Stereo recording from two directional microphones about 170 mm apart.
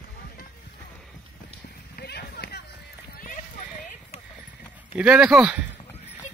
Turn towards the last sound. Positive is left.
turn(degrees=-5)  # may be behind; listen again after turning